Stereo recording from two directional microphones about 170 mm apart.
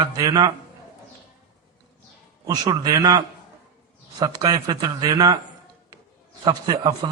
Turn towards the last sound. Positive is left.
turn(degrees=-25)  # may be behind; listen again after turning